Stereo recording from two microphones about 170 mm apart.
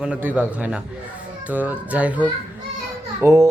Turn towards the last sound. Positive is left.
turn(degrees=-20)  # may be behind; listen again after turning